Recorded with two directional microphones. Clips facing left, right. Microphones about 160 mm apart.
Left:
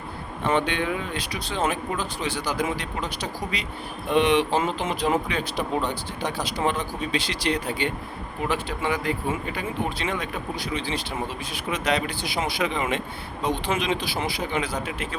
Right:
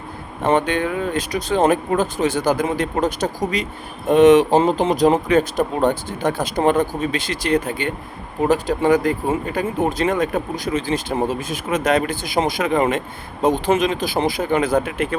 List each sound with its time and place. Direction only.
0.4 s speech: 45° right (ahead or behind)